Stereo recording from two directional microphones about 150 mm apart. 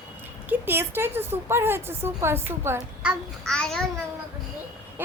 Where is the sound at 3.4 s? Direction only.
5° left (ahead or behind).